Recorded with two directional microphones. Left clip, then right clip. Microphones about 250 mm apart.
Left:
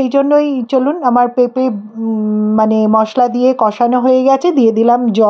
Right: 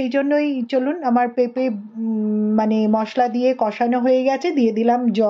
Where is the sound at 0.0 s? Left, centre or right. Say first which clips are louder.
Left 8 dB; centre.